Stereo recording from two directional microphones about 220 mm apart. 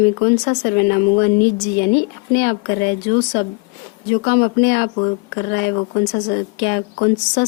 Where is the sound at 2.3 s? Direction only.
50° left (ahead or behind).